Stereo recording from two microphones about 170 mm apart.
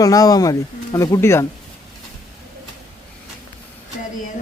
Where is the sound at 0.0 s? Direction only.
20° left (ahead or behind).